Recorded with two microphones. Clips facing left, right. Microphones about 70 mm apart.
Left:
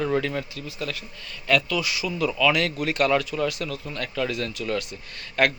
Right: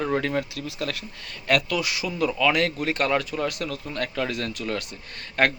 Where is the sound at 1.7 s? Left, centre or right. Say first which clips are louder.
Even; right.